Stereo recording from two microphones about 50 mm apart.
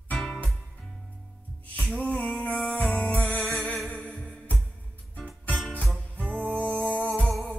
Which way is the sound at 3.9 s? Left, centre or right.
Left.